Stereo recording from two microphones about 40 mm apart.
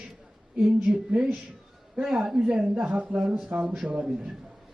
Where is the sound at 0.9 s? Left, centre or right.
Right.